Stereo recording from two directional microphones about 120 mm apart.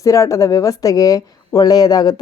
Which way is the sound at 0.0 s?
25° left (ahead or behind).